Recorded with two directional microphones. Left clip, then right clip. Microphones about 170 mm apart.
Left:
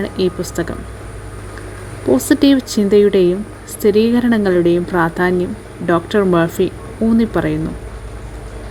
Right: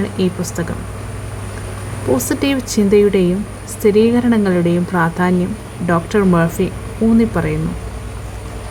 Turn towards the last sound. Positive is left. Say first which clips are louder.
# even
turn(degrees=40)  # may be behind; listen again after turning